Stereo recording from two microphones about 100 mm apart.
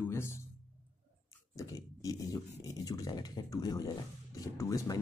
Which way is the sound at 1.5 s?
35° left (ahead or behind).